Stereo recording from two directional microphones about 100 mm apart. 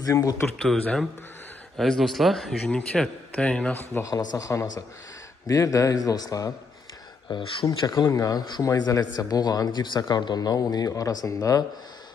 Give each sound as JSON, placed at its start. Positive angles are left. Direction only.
{"t": 0.0, "sound": "speech", "side_deg": 40}
{"t": 1.8, "sound": "a man's voice", "side_deg": 0}
{"t": 4.0, "sound": "speech", "side_deg": 35}
{"t": 7.3, "sound": "speech", "side_deg": 50}